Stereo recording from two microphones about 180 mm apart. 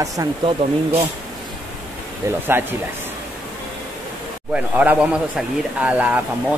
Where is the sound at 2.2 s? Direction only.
10° right (ahead or behind).